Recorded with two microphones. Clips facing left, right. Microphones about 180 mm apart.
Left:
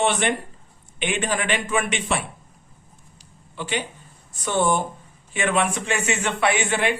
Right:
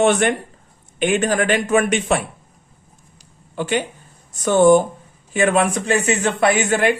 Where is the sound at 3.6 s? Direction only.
50° right (ahead or behind).